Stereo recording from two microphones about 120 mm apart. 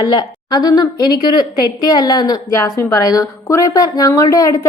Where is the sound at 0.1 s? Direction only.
35° left (ahead or behind).